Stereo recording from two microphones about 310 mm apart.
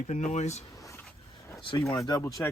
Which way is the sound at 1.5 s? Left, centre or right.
Centre.